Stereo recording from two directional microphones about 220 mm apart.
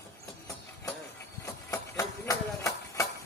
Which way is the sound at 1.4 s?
15° left (ahead or behind).